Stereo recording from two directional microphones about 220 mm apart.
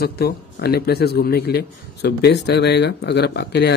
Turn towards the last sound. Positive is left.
turn(degrees=50)  # may be behind; listen again after turning